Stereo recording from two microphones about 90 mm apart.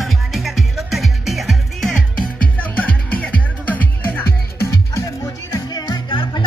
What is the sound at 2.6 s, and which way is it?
Music, 15° left (ahead or behind).